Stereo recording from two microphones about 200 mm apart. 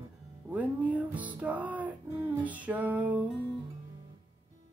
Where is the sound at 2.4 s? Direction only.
5° right (ahead or behind).